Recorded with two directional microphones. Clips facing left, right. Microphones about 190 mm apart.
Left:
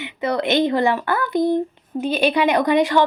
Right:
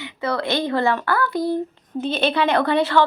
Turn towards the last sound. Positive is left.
turn(degrees=15)  # may be behind; listen again after turning